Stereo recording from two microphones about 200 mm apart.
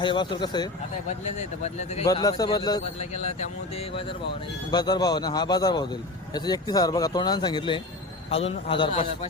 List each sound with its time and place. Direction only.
0.0 s speech: 25° left (ahead or behind)
1.4 s speech: 35° left (ahead or behind)
2.0 s speech: 20° left (ahead or behind)
3.0 s speech: 35° left (ahead or behind)
4.7 s speech: 20° left (ahead or behind)